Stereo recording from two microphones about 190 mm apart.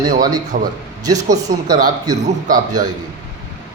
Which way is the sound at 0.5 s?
45° right (ahead or behind).